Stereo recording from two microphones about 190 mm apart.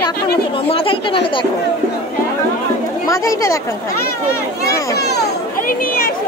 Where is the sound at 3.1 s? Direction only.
15° left (ahead or behind).